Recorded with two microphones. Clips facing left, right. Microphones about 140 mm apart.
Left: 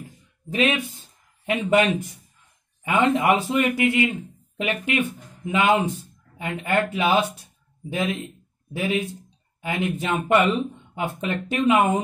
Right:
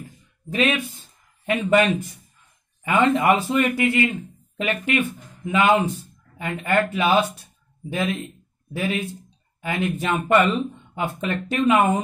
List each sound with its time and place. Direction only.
0.5 s speech: 20° left (ahead or behind)